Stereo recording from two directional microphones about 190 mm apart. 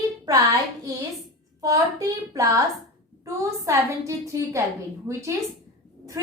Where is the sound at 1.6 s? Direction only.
15° right (ahead or behind).